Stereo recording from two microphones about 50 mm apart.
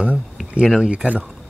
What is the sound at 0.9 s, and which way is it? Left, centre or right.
Speech, right.